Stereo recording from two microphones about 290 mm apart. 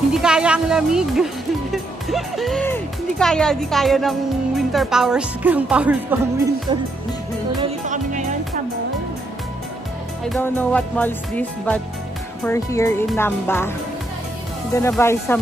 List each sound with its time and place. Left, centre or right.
0.1 s speech: centre
7.6 s music: right
10.2 s speech: centre
14.7 s speech: centre